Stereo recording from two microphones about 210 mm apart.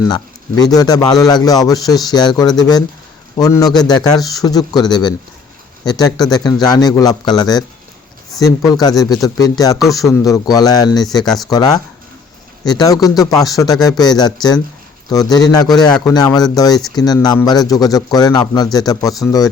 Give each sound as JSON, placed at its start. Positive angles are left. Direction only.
{"t": 0.1, "sound": "speech", "side_deg": 20}